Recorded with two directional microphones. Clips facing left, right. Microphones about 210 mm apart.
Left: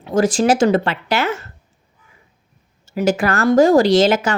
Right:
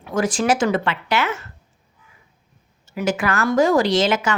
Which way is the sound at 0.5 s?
40° left (ahead or behind).